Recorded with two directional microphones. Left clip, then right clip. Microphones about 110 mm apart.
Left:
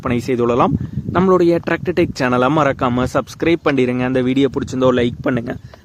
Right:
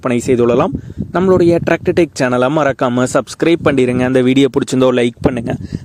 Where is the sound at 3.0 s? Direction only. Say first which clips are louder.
Right 4 dB; 50° right (ahead or behind); by 4.3 s 90° right.